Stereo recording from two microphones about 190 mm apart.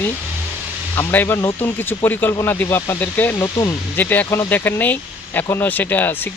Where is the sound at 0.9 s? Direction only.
10° left (ahead or behind).